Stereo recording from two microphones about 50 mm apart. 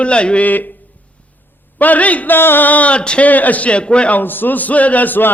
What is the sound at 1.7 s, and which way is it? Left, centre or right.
Speech, left.